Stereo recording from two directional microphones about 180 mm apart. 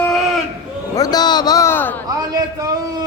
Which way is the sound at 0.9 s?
20° left (ahead or behind).